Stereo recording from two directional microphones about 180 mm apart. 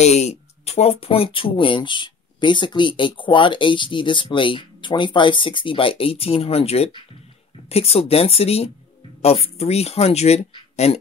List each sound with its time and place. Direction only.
0.0 s speech: 40° left (ahead or behind)